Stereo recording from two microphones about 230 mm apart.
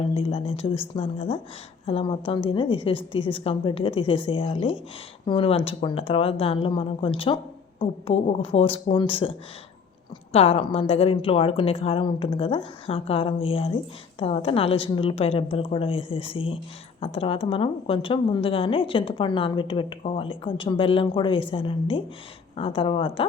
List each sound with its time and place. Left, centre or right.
0.0 s a woman's voice: left
10.3 s a woman's voice: left